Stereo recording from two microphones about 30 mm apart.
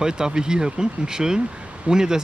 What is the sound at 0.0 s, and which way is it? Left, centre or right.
Speech, right.